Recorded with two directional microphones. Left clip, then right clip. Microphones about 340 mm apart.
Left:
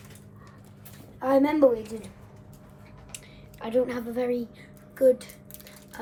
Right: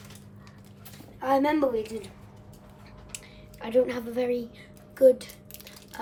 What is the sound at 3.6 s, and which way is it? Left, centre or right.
Speech, centre.